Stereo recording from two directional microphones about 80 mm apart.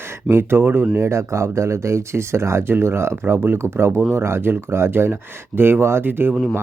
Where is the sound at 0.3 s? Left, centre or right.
Right.